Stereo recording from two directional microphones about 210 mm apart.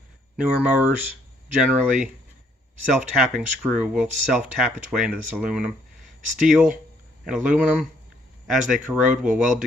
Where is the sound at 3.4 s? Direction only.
5° right (ahead or behind).